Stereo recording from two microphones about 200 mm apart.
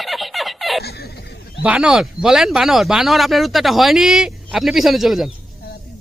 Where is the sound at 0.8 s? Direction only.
50° left (ahead or behind).